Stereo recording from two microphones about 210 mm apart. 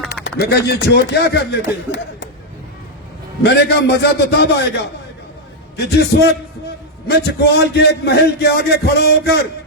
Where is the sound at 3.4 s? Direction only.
55° left (ahead or behind).